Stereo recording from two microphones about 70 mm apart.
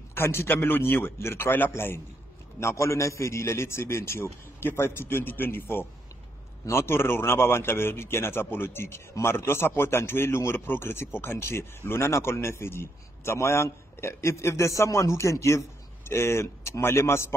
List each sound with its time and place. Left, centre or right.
0.1 s speech: left